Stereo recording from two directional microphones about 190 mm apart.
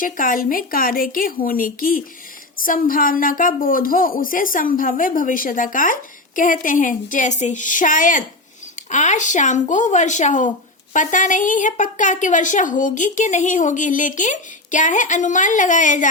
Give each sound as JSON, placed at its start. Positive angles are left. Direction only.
{"t": 0.0, "sound": "a woman's voice", "side_deg": 45}